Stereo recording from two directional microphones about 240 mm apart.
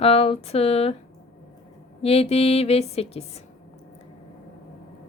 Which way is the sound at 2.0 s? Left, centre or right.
Left.